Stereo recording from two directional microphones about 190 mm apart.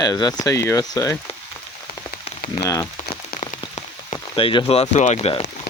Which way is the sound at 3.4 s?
30° left (ahead or behind).